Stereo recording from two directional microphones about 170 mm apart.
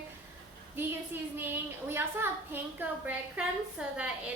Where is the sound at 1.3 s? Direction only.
10° right (ahead or behind).